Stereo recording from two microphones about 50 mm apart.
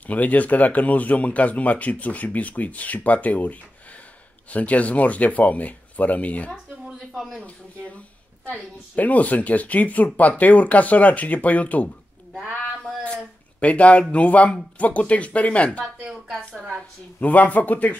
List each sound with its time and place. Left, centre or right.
0.0 s speech: left
7.2 s a man's voice: centre
7.4 s speech: left
13.6 s speech: left
17.2 s speech: left